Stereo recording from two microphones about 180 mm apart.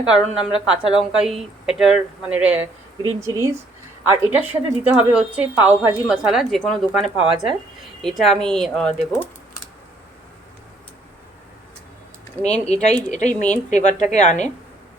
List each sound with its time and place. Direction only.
0.0 s a woman's voice: 5° right (ahead or behind)
12.5 s speech: 5° left (ahead or behind)
13.1 s speech: 40° left (ahead or behind)